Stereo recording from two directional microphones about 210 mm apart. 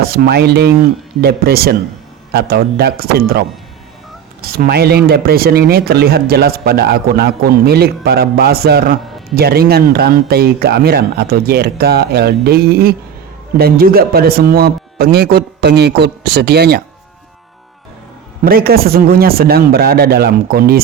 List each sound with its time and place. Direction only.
0.1 s speech: 50° right (ahead or behind)
18.4 s speech: 45° right (ahead or behind)